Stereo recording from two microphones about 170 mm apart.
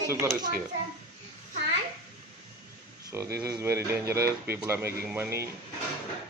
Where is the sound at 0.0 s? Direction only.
15° right (ahead or behind).